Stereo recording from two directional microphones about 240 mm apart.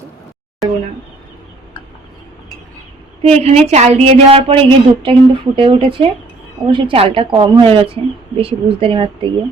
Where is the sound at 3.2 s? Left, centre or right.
Right.